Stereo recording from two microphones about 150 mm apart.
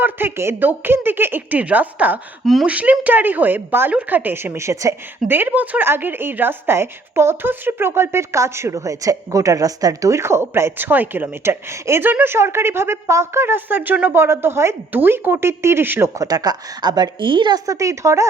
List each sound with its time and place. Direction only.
0.0 s speech: 15° right (ahead or behind)